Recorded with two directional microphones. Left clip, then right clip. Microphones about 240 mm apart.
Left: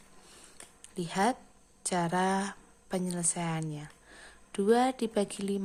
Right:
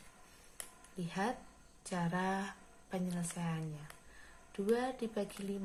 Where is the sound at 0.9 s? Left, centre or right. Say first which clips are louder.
Left 9 dB; left.